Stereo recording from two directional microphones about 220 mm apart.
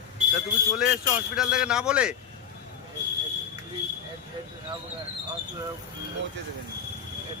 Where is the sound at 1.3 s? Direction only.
5° right (ahead or behind).